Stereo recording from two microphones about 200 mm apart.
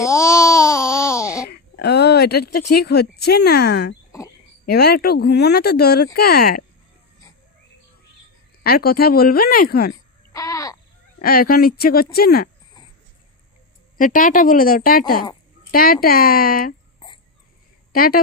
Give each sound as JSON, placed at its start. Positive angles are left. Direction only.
{"t": 0.0, "sound": "babbling", "side_deg": 15}
{"t": 1.5, "sound": "speech", "side_deg": 55}
{"t": 8.6, "sound": "speech", "side_deg": 50}
{"t": 9.9, "sound": "babbling", "side_deg": 15}
{"t": 11.2, "sound": "speech", "side_deg": 50}
{"t": 14.0, "sound": "speech", "side_deg": 40}
{"t": 17.9, "sound": "a woman's voice", "side_deg": 45}